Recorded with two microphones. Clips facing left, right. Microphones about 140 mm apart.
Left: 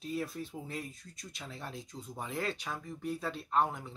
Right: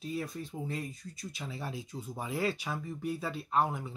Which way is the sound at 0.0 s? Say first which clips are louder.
Even; centre (ahead or behind).